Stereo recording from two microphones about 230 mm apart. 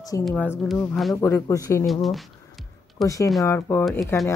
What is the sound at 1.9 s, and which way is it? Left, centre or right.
Speech, centre.